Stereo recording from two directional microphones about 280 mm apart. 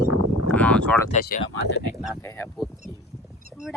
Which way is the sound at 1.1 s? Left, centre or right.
Left.